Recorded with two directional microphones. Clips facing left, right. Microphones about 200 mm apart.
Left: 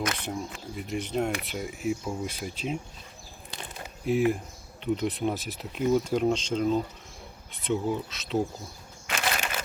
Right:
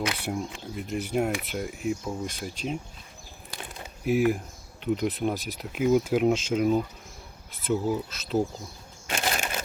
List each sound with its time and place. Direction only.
0.0 s speech: 10° right (ahead or behind)
3.6 s crumpling: 5° right (ahead or behind)
4.8 s speech: centre (ahead or behind)
9.0 s crushing: 30° right (ahead or behind)